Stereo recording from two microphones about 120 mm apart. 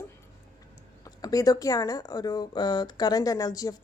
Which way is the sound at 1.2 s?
30° left (ahead or behind).